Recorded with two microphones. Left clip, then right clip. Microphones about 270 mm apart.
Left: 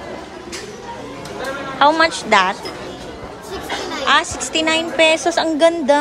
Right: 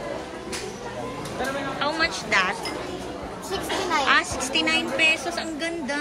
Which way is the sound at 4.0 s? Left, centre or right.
Centre.